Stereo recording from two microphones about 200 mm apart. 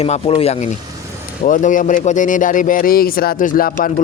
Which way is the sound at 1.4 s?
40° left (ahead or behind).